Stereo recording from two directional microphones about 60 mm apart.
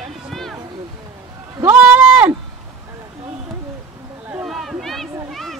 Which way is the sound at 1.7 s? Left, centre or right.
Right.